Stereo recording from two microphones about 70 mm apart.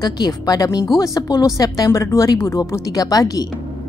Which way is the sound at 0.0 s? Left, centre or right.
Left.